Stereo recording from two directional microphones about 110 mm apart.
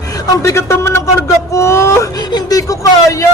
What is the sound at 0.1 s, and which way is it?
A man's voice, 25° left (ahead or behind).